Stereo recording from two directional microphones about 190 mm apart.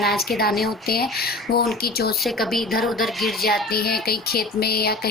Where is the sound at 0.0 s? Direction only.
55° left (ahead or behind).